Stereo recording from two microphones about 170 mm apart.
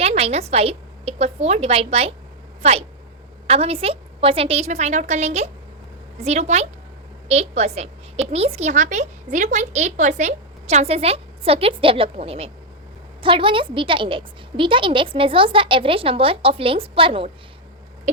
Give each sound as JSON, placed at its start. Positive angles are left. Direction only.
{"t": 0.0, "sound": "a woman's voice", "side_deg": -35}